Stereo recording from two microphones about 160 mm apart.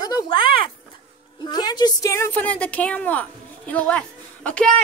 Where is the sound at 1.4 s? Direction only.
25° left (ahead or behind); by 4.7 s 5° left (ahead or behind).